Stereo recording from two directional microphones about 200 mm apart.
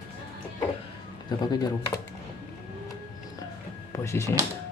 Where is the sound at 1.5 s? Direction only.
20° left (ahead or behind).